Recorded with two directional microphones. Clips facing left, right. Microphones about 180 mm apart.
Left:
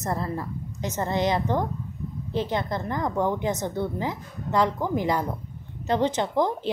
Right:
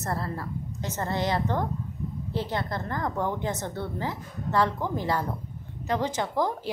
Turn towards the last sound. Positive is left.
turn(degrees=25)  # may be behind; listen again after turning